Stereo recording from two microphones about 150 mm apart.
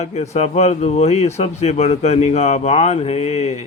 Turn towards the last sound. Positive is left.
turn(degrees=45)  # may be behind; listen again after turning